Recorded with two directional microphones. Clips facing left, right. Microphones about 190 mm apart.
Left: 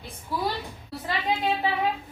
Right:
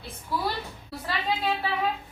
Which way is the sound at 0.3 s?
15° left (ahead or behind).